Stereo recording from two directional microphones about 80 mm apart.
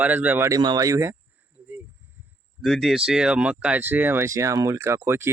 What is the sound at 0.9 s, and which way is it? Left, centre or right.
Speech, right.